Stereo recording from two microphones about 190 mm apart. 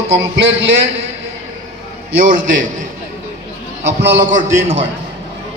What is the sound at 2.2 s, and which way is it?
Speech, 45° right (ahead or behind).